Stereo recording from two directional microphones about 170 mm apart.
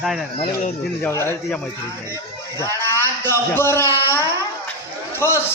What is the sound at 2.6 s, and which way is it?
A man's voice, 15° left (ahead or behind).